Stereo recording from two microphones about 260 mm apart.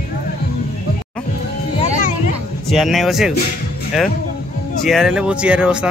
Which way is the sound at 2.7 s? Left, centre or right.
Centre.